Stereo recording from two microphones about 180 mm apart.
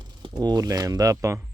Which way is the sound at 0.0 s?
25° right (ahead or behind).